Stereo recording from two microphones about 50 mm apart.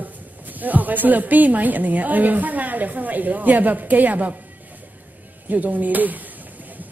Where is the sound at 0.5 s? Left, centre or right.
Right.